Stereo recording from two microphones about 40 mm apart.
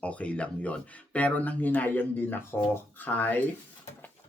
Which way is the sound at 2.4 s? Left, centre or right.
Left.